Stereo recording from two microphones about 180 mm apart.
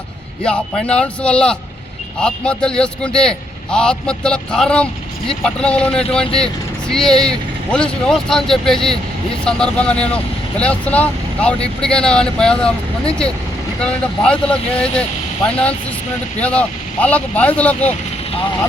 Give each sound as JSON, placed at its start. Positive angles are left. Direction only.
{"t": 0.4, "sound": "speech", "side_deg": 5}
{"t": 13.8, "sound": "speech", "side_deg": 5}